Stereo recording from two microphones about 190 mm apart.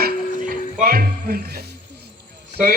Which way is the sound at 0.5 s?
50° right (ahead or behind).